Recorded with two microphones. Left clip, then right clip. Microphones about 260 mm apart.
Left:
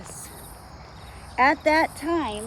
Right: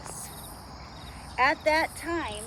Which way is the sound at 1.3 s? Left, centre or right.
Left.